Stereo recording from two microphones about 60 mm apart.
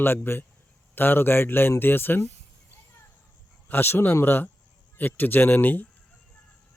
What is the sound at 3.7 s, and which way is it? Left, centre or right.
Speech, left.